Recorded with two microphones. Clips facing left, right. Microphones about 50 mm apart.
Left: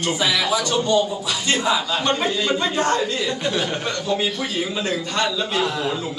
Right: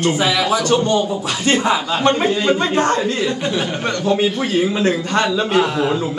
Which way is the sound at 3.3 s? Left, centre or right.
Centre.